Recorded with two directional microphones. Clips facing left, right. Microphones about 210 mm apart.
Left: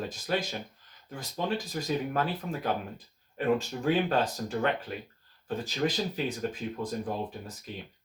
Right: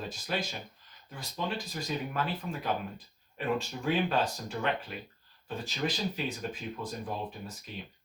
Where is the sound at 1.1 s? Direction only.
45° left (ahead or behind).